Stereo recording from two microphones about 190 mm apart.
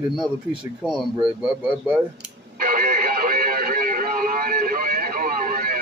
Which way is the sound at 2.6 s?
50° right (ahead or behind).